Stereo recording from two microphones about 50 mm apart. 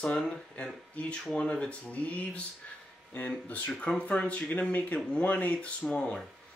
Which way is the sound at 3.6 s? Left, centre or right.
Centre.